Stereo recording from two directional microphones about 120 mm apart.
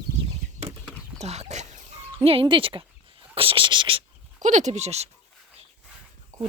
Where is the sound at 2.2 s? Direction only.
50° right (ahead or behind).